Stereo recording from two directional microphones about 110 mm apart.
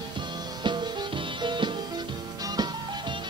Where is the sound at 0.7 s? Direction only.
45° right (ahead or behind).